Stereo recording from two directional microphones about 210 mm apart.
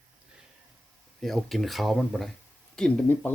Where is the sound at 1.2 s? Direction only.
Centre (ahead or behind).